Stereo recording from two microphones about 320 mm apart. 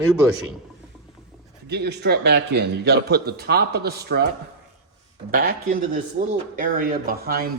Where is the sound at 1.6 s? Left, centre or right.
Right.